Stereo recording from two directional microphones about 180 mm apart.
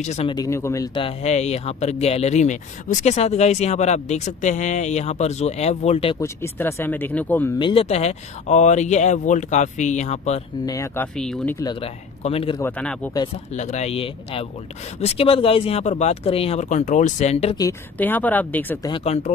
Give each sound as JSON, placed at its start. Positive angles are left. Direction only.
{"t": 0.0, "sound": "speech", "side_deg": 40}
{"t": 0.3, "sound": "speech", "side_deg": 20}
{"t": 0.9, "sound": "speech", "side_deg": 35}
{"t": 6.1, "sound": "speech", "side_deg": 15}
{"t": 7.5, "sound": "speech", "side_deg": 30}
{"t": 10.6, "sound": "speech", "side_deg": 20}
{"t": 11.1, "sound": "speech", "side_deg": 5}
{"t": 11.6, "sound": "speech", "side_deg": 25}
{"t": 12.5, "sound": "speech", "side_deg": 10}
{"t": 13.5, "sound": "speech", "side_deg": 40}
{"t": 17.6, "sound": "speech", "side_deg": 15}
{"t": 18.9, "sound": "speech", "side_deg": 25}